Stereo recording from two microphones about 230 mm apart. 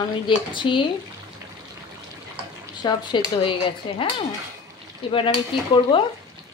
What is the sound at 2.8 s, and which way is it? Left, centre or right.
Speech, centre.